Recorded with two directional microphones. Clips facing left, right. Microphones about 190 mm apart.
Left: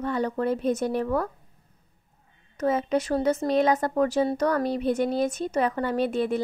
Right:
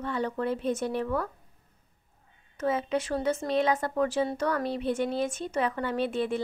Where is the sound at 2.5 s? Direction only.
40° left (ahead or behind).